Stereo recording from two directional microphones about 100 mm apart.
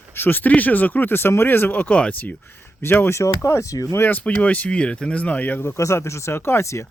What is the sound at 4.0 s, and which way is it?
Speech, 20° left (ahead or behind).